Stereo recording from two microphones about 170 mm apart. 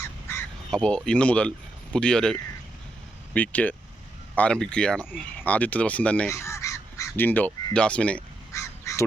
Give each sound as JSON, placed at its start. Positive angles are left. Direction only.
{"t": 0.7, "sound": "speech", "side_deg": 5}
{"t": 8.8, "sound": "duck", "side_deg": 15}